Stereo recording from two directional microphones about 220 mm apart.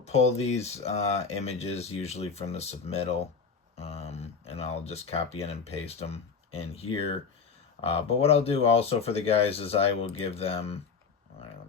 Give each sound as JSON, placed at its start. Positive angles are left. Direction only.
{"t": 0.0, "sound": "speech", "side_deg": 30}